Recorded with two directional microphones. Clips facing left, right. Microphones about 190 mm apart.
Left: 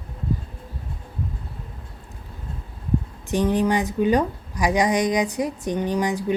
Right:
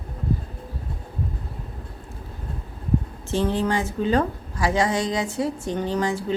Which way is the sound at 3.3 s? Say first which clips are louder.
Left 2 dB; 15° left (ahead or behind).